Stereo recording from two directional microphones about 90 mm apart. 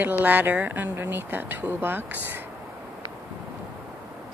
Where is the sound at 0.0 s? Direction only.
20° right (ahead or behind).